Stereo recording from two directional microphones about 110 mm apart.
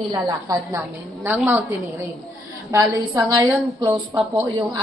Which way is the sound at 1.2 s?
15° right (ahead or behind).